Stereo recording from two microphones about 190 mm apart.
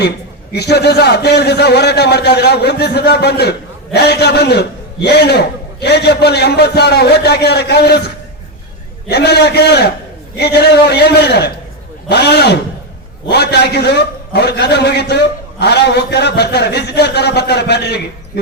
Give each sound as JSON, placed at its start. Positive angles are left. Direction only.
{"t": 0.5, "sound": "a man's voice", "side_deg": 60}